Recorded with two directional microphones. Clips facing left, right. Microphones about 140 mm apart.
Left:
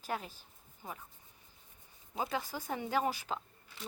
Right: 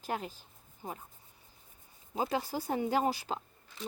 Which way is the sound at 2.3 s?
35° right (ahead or behind).